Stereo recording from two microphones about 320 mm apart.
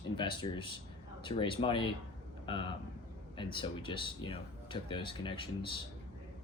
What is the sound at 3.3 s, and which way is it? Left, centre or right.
Speech, centre.